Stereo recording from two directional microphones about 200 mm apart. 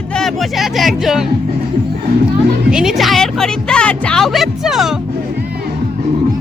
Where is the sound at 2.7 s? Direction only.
Centre (ahead or behind).